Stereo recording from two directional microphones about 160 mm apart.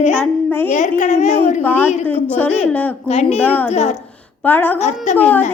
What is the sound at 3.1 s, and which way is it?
Music, 40° left (ahead or behind).